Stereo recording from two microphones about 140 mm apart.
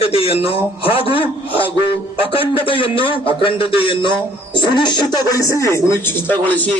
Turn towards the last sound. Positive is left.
turn(degrees=10)  # may be behind; listen again after turning